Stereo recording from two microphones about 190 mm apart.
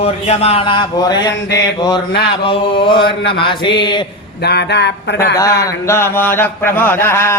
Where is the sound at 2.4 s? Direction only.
25° left (ahead or behind).